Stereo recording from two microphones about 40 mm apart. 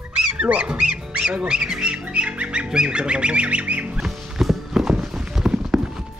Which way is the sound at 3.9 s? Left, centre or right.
Centre.